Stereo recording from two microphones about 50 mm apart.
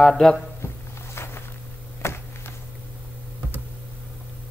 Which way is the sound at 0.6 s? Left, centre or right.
Left.